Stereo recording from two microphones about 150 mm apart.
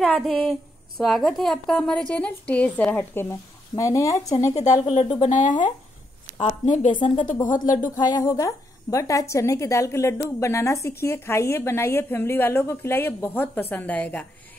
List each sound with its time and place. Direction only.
0.0 s a woman's voice: centre (ahead or behind); by 4.3 s 20° left (ahead or behind)
4.8 s speech: 45° left (ahead or behind)
7.0 s speech: 30° left (ahead or behind)
7.4 s speech: 60° left (ahead or behind)
8.2 s a woman's voice: 20° left (ahead or behind)